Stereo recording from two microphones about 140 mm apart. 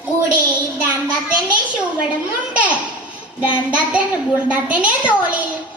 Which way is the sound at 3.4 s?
10° right (ahead or behind).